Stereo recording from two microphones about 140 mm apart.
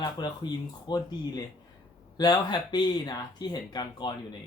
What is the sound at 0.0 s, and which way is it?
Speech, 30° left (ahead or behind).